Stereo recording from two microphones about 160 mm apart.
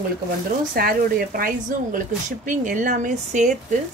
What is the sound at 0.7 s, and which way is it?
A woman's voice, 65° right (ahead or behind).